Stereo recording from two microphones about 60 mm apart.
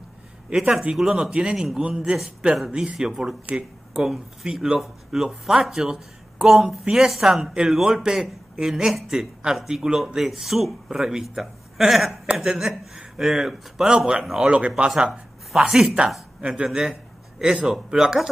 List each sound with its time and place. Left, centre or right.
0.6 s a man's voice: centre
14.9 s speech: centre